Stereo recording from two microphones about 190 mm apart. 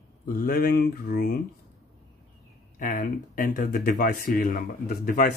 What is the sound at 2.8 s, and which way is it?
Speech, 45° left (ahead or behind).